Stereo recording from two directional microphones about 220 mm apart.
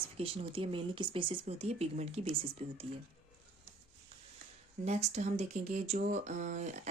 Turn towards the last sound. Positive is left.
turn(degrees=-30)  # may be behind; listen again after turning